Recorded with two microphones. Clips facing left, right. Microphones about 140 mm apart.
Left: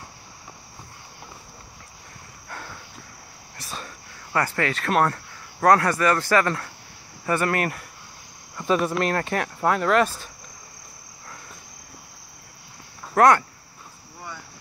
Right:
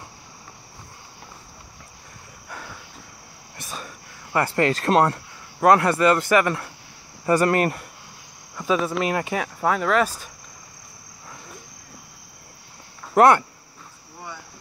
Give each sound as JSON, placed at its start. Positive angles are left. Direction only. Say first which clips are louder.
{"t": 2.5, "sound": "a sound", "louder": "even", "side_deg": -5}
{"t": 3.5, "sound": "a sound", "louder": "right 1 dB", "side_deg": -15}
{"t": 4.4, "sound": "speech", "louder": "right 4 dB", "side_deg": -30}
{"t": 7.2, "sound": "speech", "louder": "right 5 dB", "side_deg": -30}
{"t": 8.5, "sound": "speech", "louder": "even", "side_deg": 0}
{"t": 13.1, "sound": "speech", "louder": "right 2 dB", "side_deg": -25}